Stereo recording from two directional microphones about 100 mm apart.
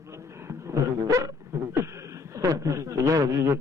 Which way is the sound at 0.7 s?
35° right (ahead or behind).